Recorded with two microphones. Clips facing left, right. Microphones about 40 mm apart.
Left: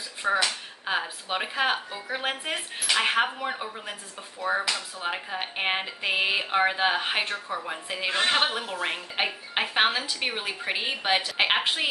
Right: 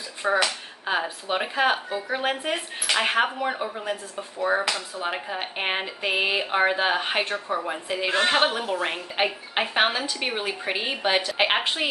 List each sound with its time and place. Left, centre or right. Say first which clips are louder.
0.2 s a woman's voice: right 2 dB; centre
4.6 s speech: right 2 dB; right
5.0 s a woman's voice: right 1 dB; centre
7.3 s a woman's voice: right 4 dB; centre